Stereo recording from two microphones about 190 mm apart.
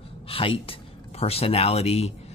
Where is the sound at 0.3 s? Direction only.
30° left (ahead or behind).